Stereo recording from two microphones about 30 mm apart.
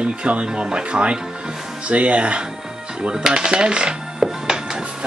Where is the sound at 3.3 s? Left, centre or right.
Right.